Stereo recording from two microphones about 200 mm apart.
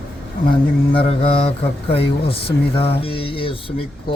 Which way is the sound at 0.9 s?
30° left (ahead or behind).